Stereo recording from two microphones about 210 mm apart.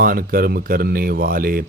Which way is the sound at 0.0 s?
45° right (ahead or behind).